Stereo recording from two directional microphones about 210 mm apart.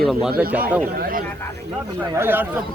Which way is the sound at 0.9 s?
45° right (ahead or behind).